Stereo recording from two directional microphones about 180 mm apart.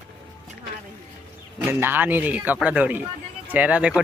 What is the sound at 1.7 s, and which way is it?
Speech, 10° right (ahead or behind).